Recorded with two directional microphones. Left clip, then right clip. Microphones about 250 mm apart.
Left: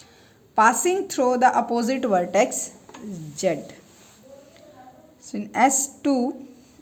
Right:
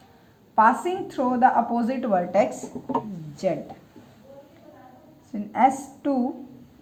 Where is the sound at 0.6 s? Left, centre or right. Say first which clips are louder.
Left 1 dB; left.